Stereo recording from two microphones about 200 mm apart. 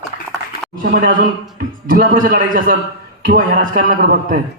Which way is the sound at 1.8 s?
45° right (ahead or behind).